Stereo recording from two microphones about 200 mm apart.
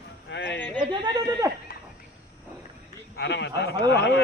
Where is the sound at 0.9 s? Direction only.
20° right (ahead or behind).